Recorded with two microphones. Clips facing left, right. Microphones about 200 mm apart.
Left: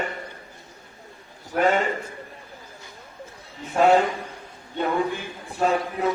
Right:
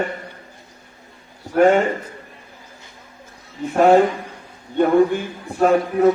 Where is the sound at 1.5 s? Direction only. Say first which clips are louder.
Right 7 dB; 50° right (ahead or behind).